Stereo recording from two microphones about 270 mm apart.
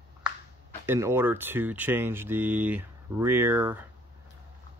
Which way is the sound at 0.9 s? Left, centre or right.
Centre.